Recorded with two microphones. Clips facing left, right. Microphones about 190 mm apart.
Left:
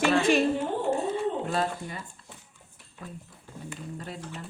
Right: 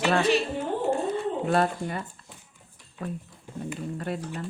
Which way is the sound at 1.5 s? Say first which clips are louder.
Right 5 dB; 60° right (ahead or behind).